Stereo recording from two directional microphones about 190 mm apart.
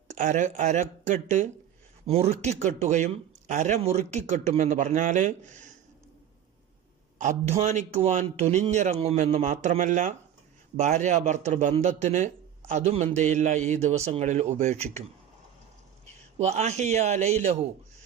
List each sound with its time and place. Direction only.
0.1 s a man's voice: 40° right (ahead or behind)
7.2 s a man's voice: 35° right (ahead or behind)
16.4 s a man's voice: 35° right (ahead or behind)